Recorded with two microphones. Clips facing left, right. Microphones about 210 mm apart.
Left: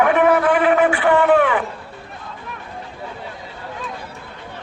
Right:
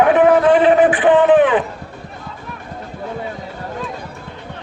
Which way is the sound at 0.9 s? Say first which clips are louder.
Right 3 dB; 20° right (ahead or behind).